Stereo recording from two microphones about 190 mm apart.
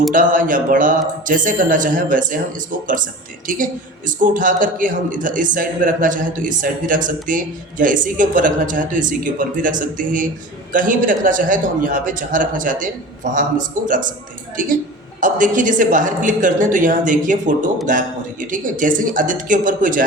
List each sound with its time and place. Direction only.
0.1 s a man's voice: 45° right (ahead or behind)
3.4 s a man's voice: 45° right (ahead or behind)